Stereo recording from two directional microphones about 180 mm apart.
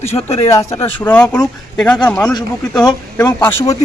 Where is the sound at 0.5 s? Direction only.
15° left (ahead or behind).